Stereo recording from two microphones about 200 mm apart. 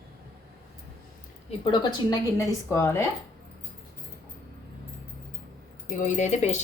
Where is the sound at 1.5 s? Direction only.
25° left (ahead or behind).